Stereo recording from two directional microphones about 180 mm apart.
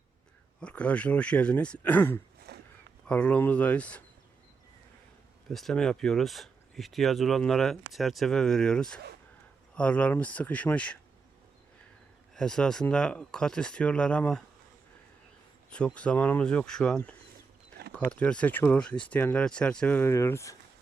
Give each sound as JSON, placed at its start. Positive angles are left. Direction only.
{"t": 0.6, "sound": "speech", "side_deg": 5}
{"t": 2.5, "sound": "a sound", "side_deg": -65}
{"t": 3.1, "sound": "speech", "side_deg": 5}
{"t": 5.5, "sound": "speech", "side_deg": 0}
{"t": 12.3, "sound": "speech", "side_deg": 5}
{"t": 16.0, "sound": "speech", "side_deg": 5}
{"t": 17.7, "sound": "a sound", "side_deg": -60}
{"t": 18.1, "sound": "speech", "side_deg": 5}